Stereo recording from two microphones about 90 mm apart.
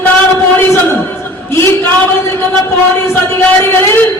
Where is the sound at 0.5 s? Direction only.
25° left (ahead or behind).